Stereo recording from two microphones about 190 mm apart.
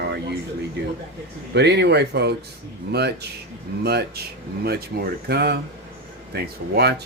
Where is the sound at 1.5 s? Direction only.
60° right (ahead or behind).